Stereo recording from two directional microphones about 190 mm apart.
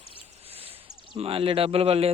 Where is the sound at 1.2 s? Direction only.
30° right (ahead or behind).